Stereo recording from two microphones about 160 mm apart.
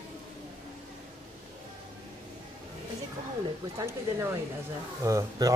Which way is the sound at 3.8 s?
15° right (ahead or behind).